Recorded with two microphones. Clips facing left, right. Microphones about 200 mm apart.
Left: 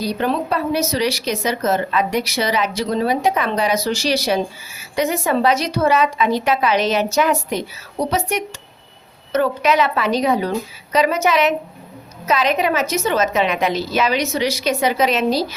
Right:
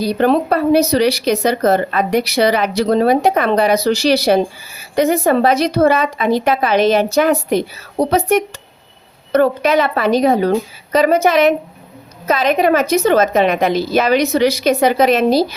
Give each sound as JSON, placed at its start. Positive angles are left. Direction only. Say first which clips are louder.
{"t": 0.0, "sound": "a woman's voice", "louder": "right 6 dB", "side_deg": -60}